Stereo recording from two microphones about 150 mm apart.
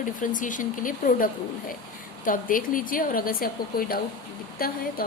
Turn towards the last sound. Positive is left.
turn(degrees=80)